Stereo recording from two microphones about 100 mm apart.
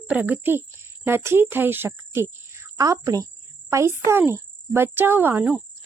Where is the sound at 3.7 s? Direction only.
25° right (ahead or behind).